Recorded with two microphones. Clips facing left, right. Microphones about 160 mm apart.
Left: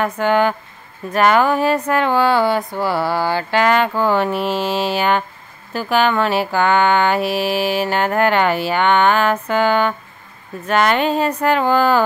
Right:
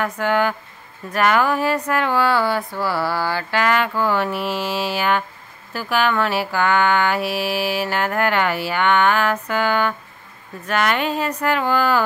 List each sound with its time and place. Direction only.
0.0 s mantra: 25° left (ahead or behind)